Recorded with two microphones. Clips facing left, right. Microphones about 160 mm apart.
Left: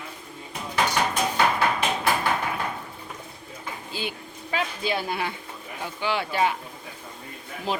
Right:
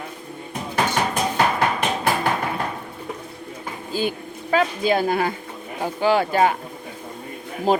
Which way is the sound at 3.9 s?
45° right (ahead or behind).